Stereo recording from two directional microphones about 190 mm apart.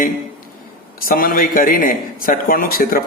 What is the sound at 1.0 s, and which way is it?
A man's voice, 50° left (ahead or behind).